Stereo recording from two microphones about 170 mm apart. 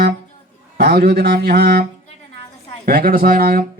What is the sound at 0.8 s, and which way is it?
Speech, 70° right (ahead or behind).